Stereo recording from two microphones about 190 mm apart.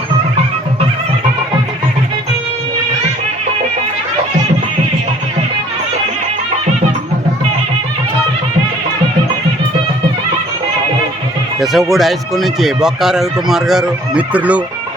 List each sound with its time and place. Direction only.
11.6 s speech: centre (ahead or behind)